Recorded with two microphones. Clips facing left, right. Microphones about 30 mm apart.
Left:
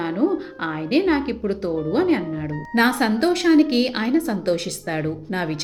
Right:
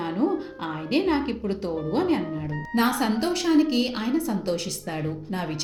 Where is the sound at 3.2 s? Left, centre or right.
Left.